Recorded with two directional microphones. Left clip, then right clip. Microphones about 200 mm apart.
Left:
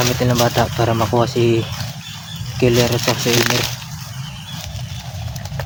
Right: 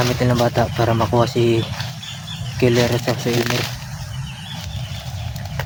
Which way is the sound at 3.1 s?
50° left (ahead or behind).